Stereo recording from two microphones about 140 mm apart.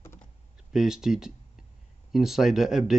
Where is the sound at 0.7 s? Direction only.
5° right (ahead or behind).